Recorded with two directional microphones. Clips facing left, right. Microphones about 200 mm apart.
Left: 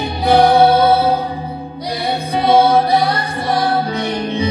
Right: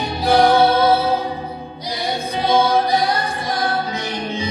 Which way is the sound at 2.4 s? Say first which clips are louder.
Left 4 dB; 60° left (ahead or behind).